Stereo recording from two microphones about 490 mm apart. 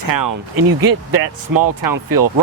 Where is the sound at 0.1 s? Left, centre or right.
Right.